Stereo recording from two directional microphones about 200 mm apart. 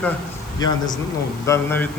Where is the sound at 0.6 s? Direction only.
20° left (ahead or behind).